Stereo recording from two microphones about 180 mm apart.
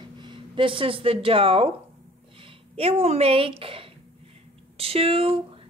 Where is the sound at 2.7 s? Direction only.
35° right (ahead or behind).